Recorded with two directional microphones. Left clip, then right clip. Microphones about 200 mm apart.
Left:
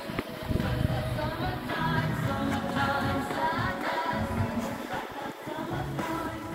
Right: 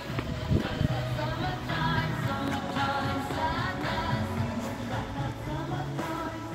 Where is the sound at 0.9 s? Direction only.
25° left (ahead or behind).